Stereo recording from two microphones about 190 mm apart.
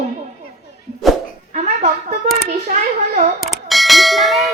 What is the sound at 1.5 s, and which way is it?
Speech, 40° right (ahead or behind).